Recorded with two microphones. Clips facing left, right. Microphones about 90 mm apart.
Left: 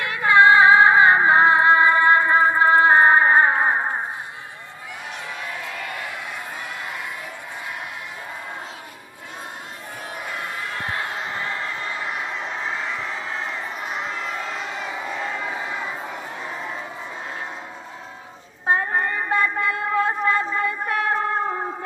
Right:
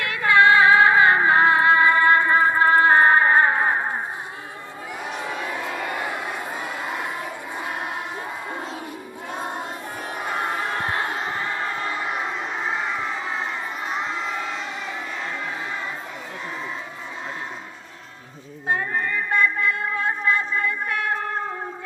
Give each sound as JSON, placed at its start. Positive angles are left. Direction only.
{"t": 0.0, "sound": "music", "side_deg": 20}
{"t": 5.2, "sound": "crowd", "side_deg": -25}
{"t": 10.2, "sound": "crowd", "side_deg": -35}
{"t": 12.6, "sound": "crowd", "side_deg": -5}
{"t": 18.7, "sound": "a sound", "side_deg": 40}